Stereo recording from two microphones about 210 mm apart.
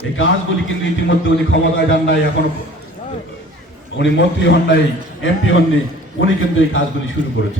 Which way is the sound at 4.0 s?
60° left (ahead or behind).